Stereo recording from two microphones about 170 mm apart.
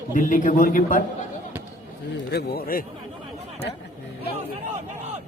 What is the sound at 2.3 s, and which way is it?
Speech, 65° left (ahead or behind).